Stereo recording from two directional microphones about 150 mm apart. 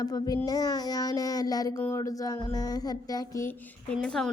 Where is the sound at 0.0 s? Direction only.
25° left (ahead or behind).